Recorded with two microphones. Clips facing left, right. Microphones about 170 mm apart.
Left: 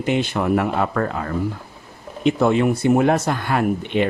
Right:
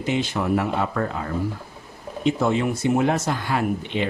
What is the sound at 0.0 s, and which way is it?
Speech, 60° left (ahead or behind).